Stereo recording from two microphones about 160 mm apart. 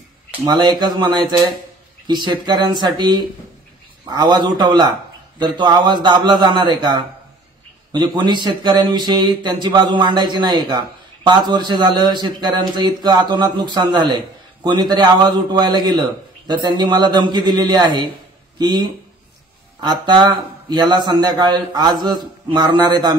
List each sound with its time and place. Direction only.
0.5 s speech: 30° right (ahead or behind)